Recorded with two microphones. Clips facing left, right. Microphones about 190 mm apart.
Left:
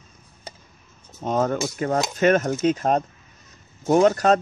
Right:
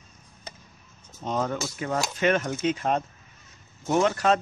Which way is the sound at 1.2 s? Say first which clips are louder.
Left 6 dB; 50° left (ahead or behind).